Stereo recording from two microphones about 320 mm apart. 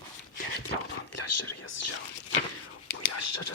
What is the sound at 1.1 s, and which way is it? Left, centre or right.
Speech, left.